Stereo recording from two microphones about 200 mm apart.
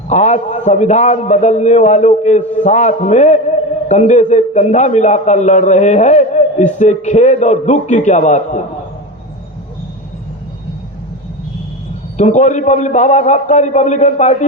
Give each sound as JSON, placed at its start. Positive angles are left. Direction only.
{"t": 0.1, "sound": "a man's voice", "side_deg": 35}
{"t": 12.1, "sound": "a man's voice", "side_deg": 35}